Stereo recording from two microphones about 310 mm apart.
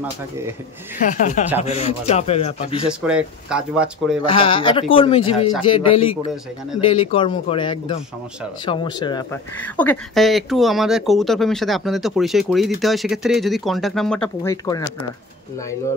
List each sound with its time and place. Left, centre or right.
0.9 s speech: left
2.9 s speech: centre
4.3 s speech: centre